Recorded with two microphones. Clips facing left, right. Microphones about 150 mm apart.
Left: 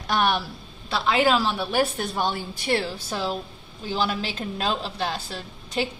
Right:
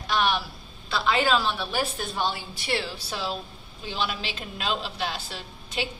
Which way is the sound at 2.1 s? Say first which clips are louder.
Left 1 dB; 50° left (ahead or behind).